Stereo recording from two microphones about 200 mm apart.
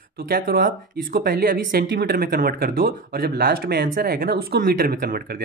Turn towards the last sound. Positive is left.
turn(degrees=-50)  # may be behind; listen again after turning